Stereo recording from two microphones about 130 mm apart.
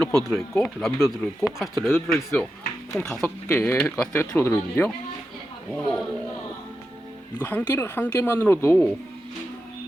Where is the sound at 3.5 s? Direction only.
15° left (ahead or behind).